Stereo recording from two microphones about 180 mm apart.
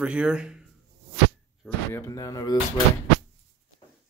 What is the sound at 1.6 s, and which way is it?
Speech, 15° left (ahead or behind).